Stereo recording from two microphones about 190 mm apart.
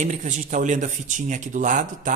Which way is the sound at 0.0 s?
40° right (ahead or behind).